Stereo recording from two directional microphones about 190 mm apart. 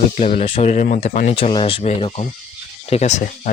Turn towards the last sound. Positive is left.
turn(degrees=40)  # may be behind; listen again after turning